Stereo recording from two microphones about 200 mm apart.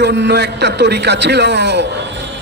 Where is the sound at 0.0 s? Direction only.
60° right (ahead or behind).